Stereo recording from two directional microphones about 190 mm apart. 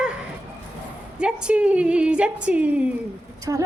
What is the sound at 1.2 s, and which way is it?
A woman's voice, 5° right (ahead or behind).